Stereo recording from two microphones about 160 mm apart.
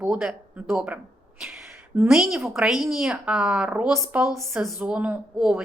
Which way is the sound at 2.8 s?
5° right (ahead or behind).